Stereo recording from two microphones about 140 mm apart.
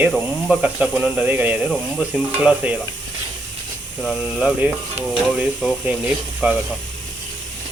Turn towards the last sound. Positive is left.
turn(degrees=-10)  # may be behind; listen again after turning